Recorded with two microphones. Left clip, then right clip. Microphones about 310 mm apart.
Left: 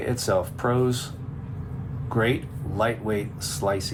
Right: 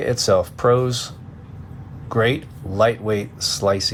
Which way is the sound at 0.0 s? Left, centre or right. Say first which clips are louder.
Right 7 dB; right.